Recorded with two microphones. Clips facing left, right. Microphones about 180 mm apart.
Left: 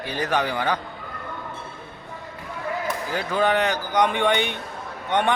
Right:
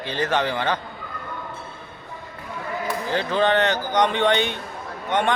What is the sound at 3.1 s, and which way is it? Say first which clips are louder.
Speech: right 2 dB; 10° left (ahead or behind).